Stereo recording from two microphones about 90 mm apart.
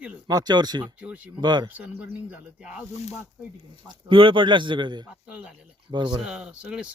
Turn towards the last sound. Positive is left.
turn(degrees=-10)  # may be behind; listen again after turning